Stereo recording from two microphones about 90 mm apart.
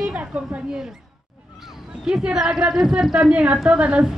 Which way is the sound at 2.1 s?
10° right (ahead or behind).